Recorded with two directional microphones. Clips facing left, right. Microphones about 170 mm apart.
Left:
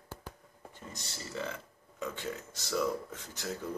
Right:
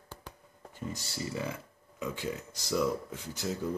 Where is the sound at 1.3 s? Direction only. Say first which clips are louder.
Right 2 dB; 10° right (ahead or behind).